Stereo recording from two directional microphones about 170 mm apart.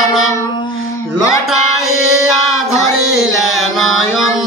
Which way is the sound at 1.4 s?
Centre (ahead or behind).